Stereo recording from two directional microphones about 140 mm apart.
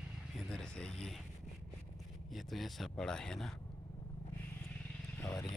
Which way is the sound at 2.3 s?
Centre (ahead or behind).